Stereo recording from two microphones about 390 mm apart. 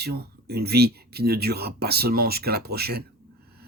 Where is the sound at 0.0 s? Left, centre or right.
Right.